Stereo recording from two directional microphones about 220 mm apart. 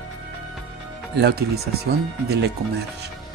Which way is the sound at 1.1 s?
45° right (ahead or behind).